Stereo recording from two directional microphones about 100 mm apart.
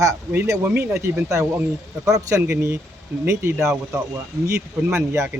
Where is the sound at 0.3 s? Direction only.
30° right (ahead or behind).